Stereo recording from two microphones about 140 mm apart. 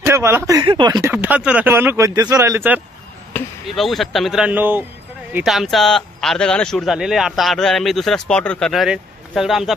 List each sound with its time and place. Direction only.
0.0 s speech: 20° right (ahead or behind)
0.7 s speech: 30° right (ahead or behind)
1.1 s speech: 10° right (ahead or behind)
3.6 s speech: centre (ahead or behind)
5.3 s speech: 5° right (ahead or behind)